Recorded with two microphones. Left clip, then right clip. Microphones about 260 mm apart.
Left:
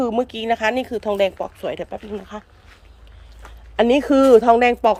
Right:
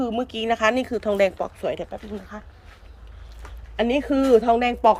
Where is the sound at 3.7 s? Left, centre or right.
Centre.